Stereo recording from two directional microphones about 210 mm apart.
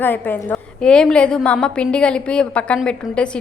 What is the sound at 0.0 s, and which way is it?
A woman's voice, 10° left (ahead or behind).